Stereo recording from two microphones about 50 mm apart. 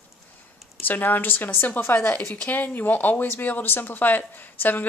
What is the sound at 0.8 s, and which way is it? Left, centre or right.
Speech, left.